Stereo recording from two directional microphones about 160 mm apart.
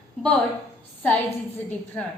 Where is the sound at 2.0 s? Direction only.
5° left (ahead or behind).